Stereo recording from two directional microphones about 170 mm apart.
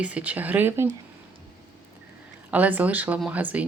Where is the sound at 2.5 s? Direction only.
10° right (ahead or behind).